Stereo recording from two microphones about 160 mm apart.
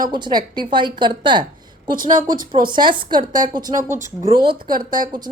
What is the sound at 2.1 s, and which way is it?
Speech, 60° right (ahead or behind).